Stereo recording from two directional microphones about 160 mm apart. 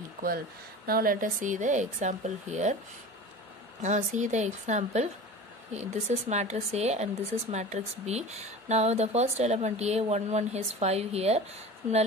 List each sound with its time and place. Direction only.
0.8 s speech: 65° right (ahead or behind); by 2.8 s 45° right (ahead or behind)
3.8 s speech: 45° right (ahead or behind)